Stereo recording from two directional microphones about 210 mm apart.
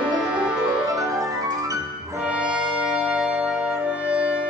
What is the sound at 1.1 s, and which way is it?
Music, 15° right (ahead or behind).